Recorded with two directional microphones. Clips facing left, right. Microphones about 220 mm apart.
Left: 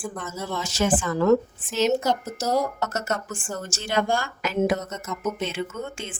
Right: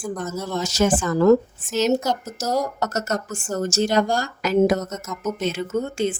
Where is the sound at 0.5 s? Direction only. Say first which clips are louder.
Right 3 dB; 40° right (ahead or behind).